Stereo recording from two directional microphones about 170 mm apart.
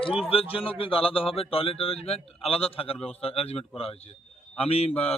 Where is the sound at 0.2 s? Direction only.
35° left (ahead or behind).